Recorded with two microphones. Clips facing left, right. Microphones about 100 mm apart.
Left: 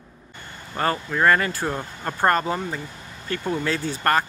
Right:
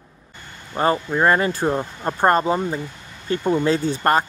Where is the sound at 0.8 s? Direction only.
20° right (ahead or behind).